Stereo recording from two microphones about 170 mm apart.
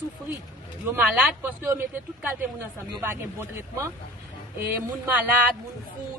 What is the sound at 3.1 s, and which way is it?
Speech, 15° right (ahead or behind).